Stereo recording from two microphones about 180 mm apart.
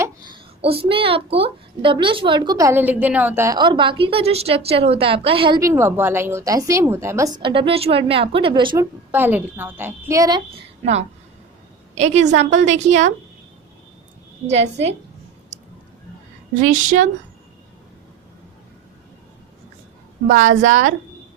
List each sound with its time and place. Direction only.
0.6 s a woman's voice: 30° right (ahead or behind)
5.5 s a woman's voice: 15° right (ahead or behind)
9.1 s a woman's voice: 10° right (ahead or behind)
11.9 s a woman's voice: 40° right (ahead or behind)
14.4 s a woman's voice: 35° right (ahead or behind)
16.6 s speech: 45° right (ahead or behind)
20.6 s speech: 45° right (ahead or behind)